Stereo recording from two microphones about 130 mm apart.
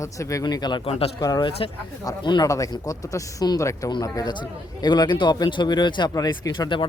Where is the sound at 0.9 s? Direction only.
50° left (ahead or behind).